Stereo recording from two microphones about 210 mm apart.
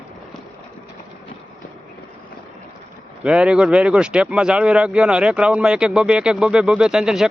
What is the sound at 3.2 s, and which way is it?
Speech, 5° right (ahead or behind).